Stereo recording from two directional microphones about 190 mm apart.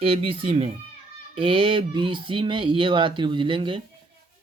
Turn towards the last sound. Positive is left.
turn(degrees=-25)  # may be behind; listen again after turning